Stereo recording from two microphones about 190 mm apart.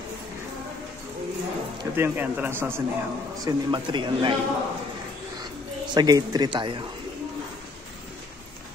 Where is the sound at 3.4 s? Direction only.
25° right (ahead or behind).